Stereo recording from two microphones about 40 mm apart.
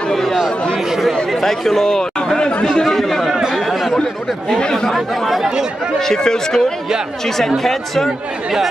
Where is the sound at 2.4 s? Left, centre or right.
Left.